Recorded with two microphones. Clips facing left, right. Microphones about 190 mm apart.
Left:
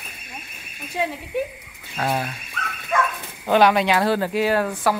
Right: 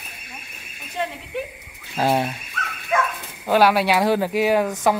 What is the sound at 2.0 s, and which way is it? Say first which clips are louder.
Speech: right 4 dB; 25° right (ahead or behind).